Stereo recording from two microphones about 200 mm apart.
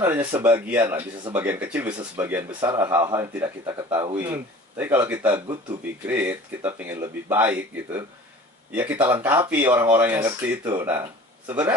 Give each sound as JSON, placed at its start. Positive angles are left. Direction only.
{"t": 0.0, "sound": "speech", "side_deg": -10}
{"t": 4.7, "sound": "speech", "side_deg": -10}
{"t": 5.3, "sound": "speech", "side_deg": -25}
{"t": 6.0, "sound": "speech", "side_deg": -10}